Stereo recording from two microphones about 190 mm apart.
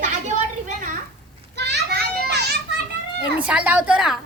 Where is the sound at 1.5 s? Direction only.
65° right (ahead or behind).